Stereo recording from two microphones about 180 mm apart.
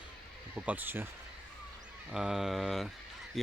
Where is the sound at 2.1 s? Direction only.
Centre (ahead or behind).